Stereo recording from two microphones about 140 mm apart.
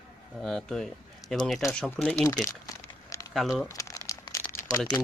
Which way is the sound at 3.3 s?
Centre (ahead or behind).